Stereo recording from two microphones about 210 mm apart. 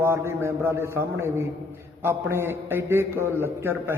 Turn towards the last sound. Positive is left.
turn(degrees=-10)  # may be behind; listen again after turning